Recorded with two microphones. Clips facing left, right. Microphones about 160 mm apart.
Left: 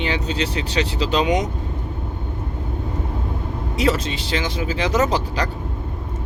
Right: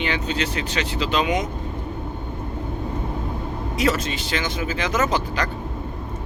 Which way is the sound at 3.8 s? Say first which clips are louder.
Left 2 dB; 30° left (ahead or behind).